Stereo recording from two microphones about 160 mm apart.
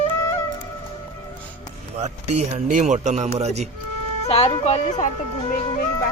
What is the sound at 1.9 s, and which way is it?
Speech, 45° right (ahead or behind).